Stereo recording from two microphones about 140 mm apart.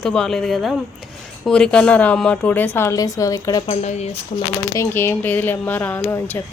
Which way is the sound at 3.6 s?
55° left (ahead or behind).